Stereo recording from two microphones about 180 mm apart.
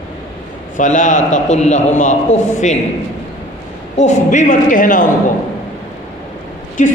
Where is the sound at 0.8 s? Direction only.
45° left (ahead or behind).